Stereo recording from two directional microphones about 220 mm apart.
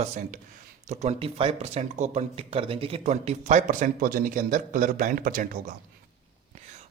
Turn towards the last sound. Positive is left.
turn(degrees=-40)  # may be behind; listen again after turning